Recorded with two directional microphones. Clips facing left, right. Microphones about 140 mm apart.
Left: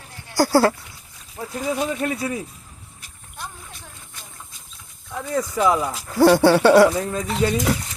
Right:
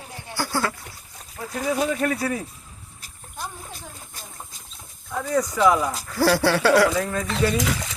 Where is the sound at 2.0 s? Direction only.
20° left (ahead or behind).